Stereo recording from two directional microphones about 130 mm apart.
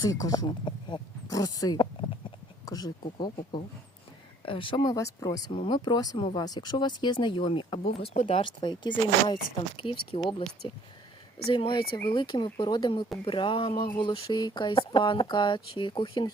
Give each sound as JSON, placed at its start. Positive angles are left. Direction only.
{"t": 0.0, "sound": "speech", "side_deg": 25}
{"t": 5.5, "sound": "speech", "side_deg": 45}
{"t": 11.4, "sound": "speech", "side_deg": 45}